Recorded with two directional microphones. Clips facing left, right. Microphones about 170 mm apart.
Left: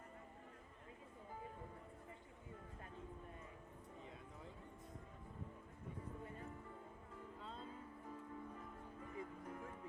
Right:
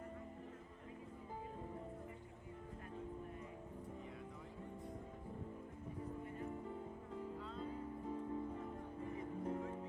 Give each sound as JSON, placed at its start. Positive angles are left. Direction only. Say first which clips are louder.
{"t": 8.1, "sound": "music", "louder": "right 8 dB", "side_deg": -30}